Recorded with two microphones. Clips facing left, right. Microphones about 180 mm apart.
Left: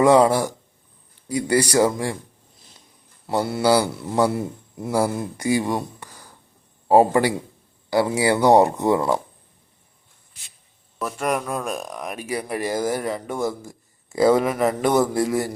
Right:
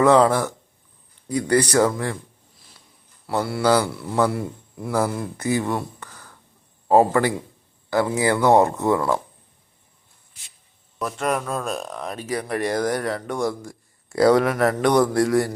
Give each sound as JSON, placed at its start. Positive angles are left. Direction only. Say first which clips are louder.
{"t": 0.0, "sound": "speech", "louder": "left 1 dB", "side_deg": 10}
{"t": 3.2, "sound": "a man's voice", "louder": "left 1 dB", "side_deg": 20}
{"t": 3.6, "sound": "speech", "louder": "left 1 dB", "side_deg": 10}
{"t": 3.8, "sound": "a man's voice", "louder": "left 1 dB", "side_deg": 20}
{"t": 10.9, "sound": "speech", "louder": "even", "side_deg": 5}